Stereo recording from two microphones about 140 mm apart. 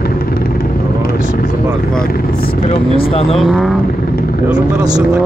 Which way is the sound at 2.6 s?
40° left (ahead or behind).